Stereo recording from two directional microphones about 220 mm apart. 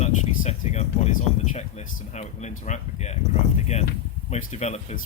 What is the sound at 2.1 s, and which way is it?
Speech, 30° left (ahead or behind).